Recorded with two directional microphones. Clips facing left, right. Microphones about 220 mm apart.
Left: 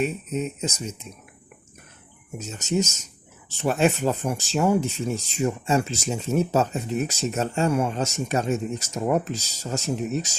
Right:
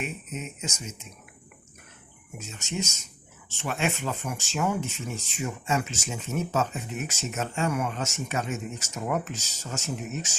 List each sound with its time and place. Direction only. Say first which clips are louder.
0.0 s speech: left 9 dB; 35° left (ahead or behind)
2.4 s speech: left 8 dB; 40° left (ahead or behind)